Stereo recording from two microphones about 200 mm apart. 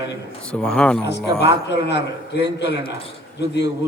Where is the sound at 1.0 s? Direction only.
60° left (ahead or behind).